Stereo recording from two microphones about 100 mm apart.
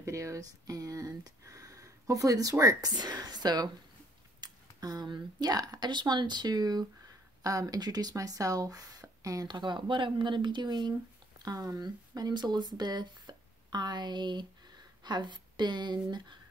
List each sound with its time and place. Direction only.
0.0 s speech: 30° right (ahead or behind)
9.5 s speech: 50° right (ahead or behind)
11.4 s speech: 35° right (ahead or behind)